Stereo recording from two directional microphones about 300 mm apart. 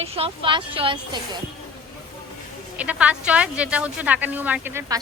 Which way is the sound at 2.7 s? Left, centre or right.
Centre.